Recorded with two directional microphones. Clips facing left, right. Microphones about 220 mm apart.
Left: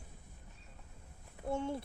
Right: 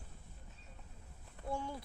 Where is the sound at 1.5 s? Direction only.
25° left (ahead or behind).